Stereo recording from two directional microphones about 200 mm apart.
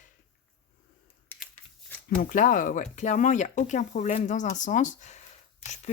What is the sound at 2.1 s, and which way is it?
Speech, 40° left (ahead or behind).